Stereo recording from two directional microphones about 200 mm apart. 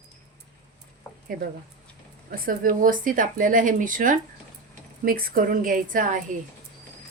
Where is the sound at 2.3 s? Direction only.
45° right (ahead or behind).